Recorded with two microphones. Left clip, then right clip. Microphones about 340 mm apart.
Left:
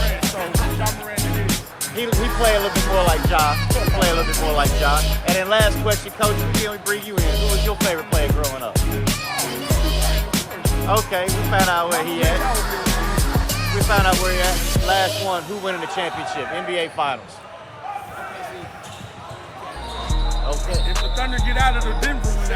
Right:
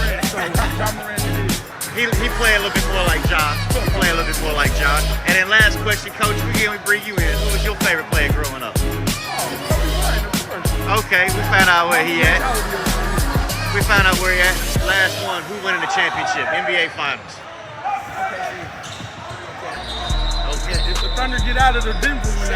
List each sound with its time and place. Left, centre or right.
0.2 s music: centre
3.0 s music: centre
3.5 s music: centre
5.4 s music: centre
6.2 s music: centre
8.4 s speech: centre
20.7 s music: centre
21.2 s music: centre
21.8 s music: centre